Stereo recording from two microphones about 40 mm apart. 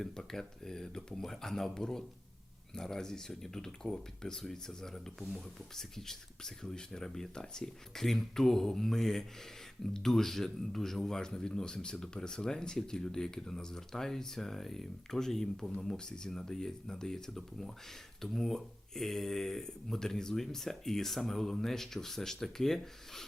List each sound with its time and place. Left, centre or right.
0.0 s speech: centre